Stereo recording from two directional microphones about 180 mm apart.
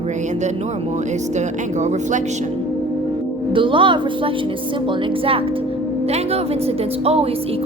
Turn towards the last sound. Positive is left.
turn(degrees=-35)  # may be behind; listen again after turning